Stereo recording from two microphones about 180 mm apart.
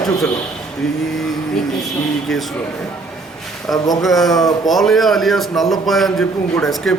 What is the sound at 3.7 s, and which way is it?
Speech, 20° left (ahead or behind).